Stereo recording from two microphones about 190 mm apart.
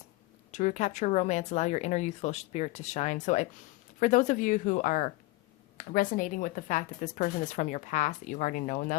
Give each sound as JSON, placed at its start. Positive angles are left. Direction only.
{"t": 0.5, "sound": "speech", "side_deg": 40}